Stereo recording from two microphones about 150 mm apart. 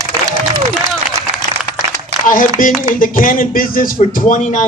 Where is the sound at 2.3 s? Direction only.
65° left (ahead or behind).